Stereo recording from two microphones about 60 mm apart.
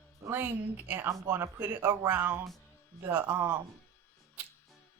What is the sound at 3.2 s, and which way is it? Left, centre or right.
Speech, right.